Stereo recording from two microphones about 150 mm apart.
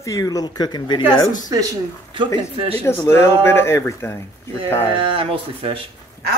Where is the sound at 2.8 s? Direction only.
15° left (ahead or behind).